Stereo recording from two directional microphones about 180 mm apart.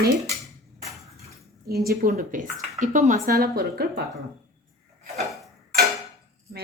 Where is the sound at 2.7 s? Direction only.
45° right (ahead or behind); by 4.0 s 60° right (ahead or behind).